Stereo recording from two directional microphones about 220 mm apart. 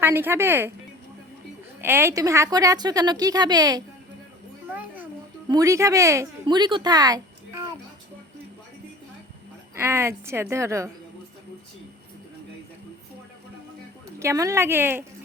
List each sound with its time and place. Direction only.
0.0 s a woman's voice: 10° right (ahead or behind)
1.8 s a woman's voice: 10° right (ahead or behind)
4.7 s a sound: 5° right (ahead or behind)
5.5 s speech: 15° right (ahead or behind)
9.7 s a woman's voice: 10° right (ahead or behind)
14.2 s a woman's voice: 15° right (ahead or behind)